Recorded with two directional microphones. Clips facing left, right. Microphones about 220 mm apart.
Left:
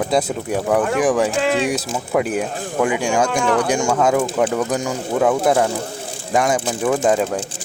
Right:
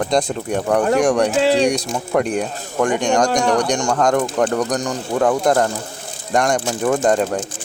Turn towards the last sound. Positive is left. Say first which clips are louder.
# right 1 dB
turn(degrees=5)  # may be behind; listen again after turning